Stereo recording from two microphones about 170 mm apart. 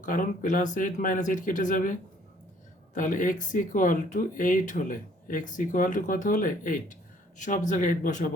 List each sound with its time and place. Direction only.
0.0 s speech: 50° left (ahead or behind)